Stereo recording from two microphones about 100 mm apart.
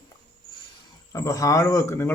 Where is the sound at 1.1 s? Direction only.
35° left (ahead or behind).